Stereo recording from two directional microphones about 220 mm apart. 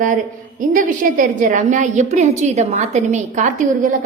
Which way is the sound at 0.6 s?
40° right (ahead or behind).